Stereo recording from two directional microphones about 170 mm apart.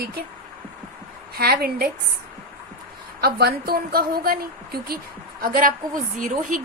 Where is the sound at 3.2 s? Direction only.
65° right (ahead or behind).